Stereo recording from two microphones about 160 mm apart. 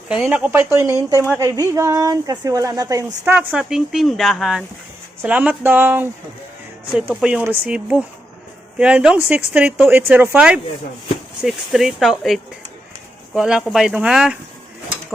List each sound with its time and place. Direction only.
0.1 s speech: 5° right (ahead or behind); by 3.3 s 20° right (ahead or behind)
3.3 s speech: 5° right (ahead or behind)
7.1 s speech: 5° right (ahead or behind)